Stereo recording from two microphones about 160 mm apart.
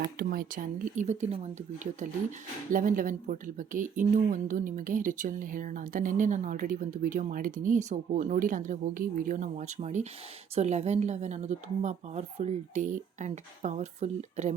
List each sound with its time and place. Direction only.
0.0 s speech: 65° right (ahead or behind); by 1.4 s 45° right (ahead or behind)
2.7 s speech: 55° right (ahead or behind)